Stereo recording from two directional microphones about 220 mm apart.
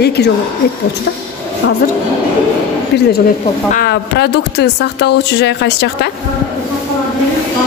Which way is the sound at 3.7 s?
45° left (ahead or behind).